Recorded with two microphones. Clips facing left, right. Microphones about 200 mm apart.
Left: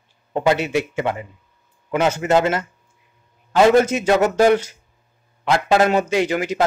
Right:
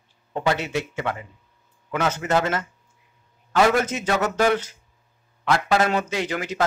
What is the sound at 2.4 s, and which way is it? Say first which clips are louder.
Speech: left 5 dB; 10° left (ahead or behind).